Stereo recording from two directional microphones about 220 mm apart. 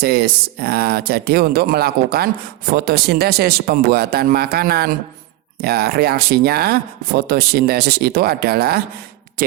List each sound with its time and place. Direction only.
0.0 s speech: 45° right (ahead or behind)